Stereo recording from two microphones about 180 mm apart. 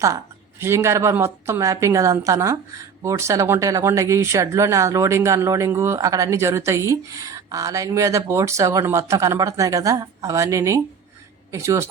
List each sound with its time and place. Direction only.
0.6 s speech: 15° right (ahead or behind)